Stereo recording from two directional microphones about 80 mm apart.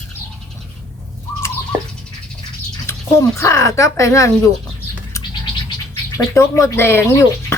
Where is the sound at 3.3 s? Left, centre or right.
Left.